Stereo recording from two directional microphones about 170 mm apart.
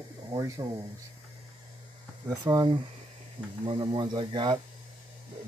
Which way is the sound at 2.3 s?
20° right (ahead or behind).